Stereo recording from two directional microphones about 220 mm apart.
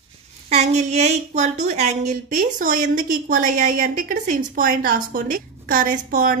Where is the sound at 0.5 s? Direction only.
30° right (ahead or behind).